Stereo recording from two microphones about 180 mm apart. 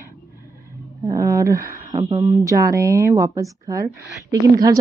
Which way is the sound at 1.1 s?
15° right (ahead or behind).